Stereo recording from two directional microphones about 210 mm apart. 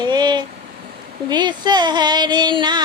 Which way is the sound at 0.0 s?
20° right (ahead or behind).